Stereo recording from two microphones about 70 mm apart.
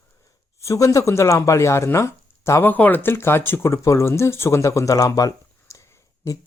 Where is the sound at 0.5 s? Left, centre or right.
Left.